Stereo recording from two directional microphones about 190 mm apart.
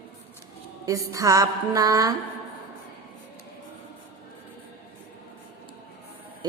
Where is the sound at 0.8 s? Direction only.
15° right (ahead or behind).